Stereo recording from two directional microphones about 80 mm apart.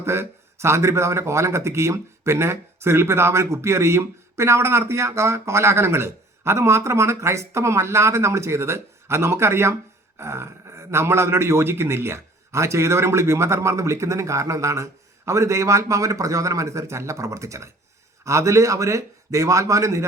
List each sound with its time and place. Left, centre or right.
0.0 s speech: right